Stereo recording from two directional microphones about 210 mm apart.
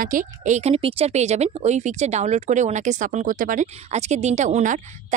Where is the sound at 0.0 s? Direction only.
40° right (ahead or behind).